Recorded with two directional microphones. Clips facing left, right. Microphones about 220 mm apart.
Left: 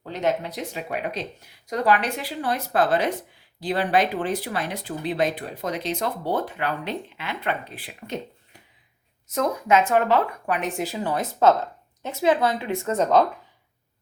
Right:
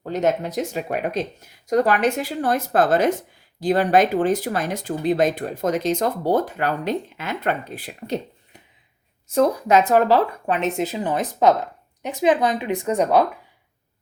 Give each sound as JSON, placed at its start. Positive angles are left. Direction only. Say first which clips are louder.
{"t": 0.0, "sound": "speech", "louder": "right 4 dB", "side_deg": -45}
{"t": 9.2, "sound": "speech", "louder": "right 6 dB", "side_deg": -30}